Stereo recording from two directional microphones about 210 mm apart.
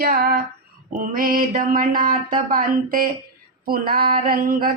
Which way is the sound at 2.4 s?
40° right (ahead or behind).